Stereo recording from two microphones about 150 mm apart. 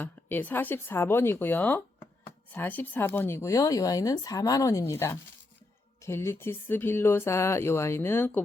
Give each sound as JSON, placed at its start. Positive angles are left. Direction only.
{"t": 0.0, "sound": "speech", "side_deg": 10}